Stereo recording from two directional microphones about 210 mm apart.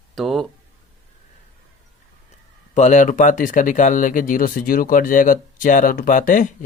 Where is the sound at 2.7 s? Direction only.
35° left (ahead or behind).